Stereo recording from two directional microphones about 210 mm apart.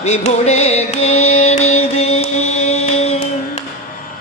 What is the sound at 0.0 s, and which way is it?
Music, 30° left (ahead or behind).